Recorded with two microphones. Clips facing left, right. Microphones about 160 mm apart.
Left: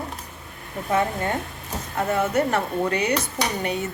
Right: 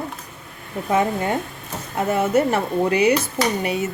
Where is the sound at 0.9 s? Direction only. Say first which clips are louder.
Right 3 dB; 15° right (ahead or behind).